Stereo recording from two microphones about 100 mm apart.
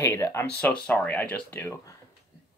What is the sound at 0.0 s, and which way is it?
Speech, 25° left (ahead or behind).